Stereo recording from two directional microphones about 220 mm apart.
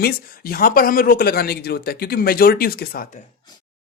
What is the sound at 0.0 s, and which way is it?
Speech, 40° left (ahead or behind).